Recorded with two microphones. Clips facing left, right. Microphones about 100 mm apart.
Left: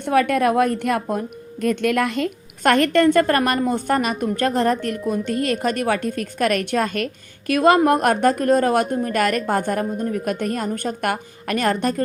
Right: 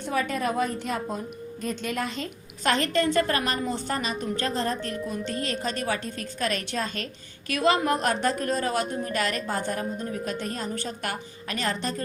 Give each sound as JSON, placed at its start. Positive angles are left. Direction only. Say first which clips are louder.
{"t": 0.0, "sound": "a woman's voice", "louder": "left 9 dB", "side_deg": 60}